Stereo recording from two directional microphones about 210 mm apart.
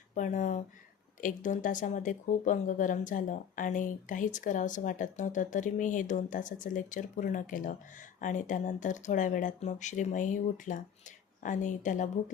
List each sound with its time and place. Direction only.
0.1 s speech: 35° left (ahead or behind)